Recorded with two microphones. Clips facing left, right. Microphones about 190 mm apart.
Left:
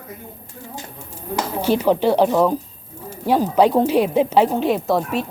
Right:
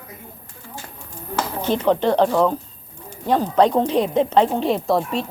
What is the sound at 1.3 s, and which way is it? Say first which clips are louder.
Speech: left 3 dB; 10° left (ahead or behind).